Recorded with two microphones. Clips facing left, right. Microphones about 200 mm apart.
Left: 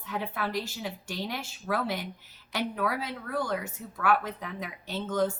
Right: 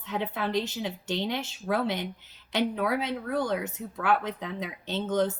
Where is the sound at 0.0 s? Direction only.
20° right (ahead or behind).